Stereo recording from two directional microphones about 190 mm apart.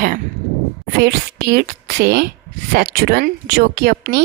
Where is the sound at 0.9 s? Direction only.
60° right (ahead or behind).